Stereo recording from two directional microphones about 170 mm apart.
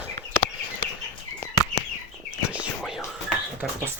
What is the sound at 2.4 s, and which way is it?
Whispering, 5° right (ahead or behind).